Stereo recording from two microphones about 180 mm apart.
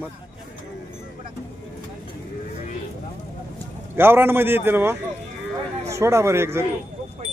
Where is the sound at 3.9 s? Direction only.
10° right (ahead or behind).